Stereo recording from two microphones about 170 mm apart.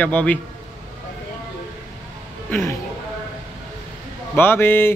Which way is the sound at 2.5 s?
15° left (ahead or behind).